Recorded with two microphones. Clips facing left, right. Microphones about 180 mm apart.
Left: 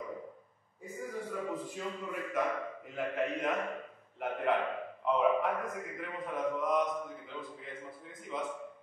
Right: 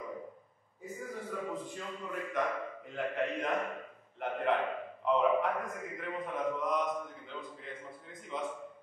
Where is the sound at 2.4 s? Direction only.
5° left (ahead or behind).